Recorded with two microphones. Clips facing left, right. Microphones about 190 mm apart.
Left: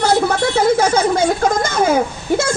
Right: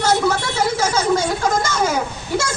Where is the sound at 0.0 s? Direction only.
55° left (ahead or behind).